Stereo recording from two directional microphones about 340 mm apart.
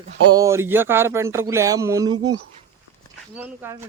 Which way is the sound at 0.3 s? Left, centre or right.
Centre.